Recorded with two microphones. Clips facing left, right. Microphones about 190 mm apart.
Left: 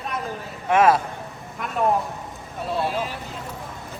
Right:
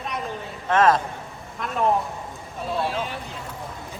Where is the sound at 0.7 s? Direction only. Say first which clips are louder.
Left 1 dB; 10° left (ahead or behind).